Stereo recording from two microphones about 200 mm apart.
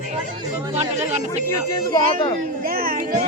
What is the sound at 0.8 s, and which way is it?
Speech, 35° right (ahead or behind).